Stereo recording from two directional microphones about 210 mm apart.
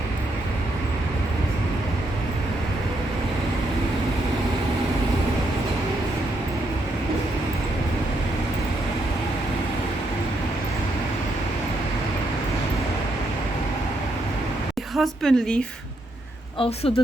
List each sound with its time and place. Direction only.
14.9 s a woman's voice: centre (ahead or behind)
16.6 s speech: 30° left (ahead or behind)